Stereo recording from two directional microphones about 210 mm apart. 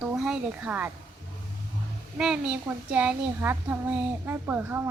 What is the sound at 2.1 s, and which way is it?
A woman's voice, 5° right (ahead or behind).